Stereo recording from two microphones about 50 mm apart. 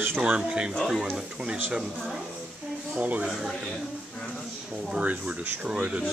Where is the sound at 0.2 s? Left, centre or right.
Right.